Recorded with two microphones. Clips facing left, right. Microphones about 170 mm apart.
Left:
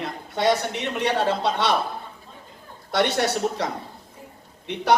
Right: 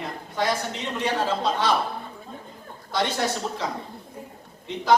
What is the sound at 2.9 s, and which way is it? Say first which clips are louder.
Speech: left 3 dB; 75° left (ahead or behind).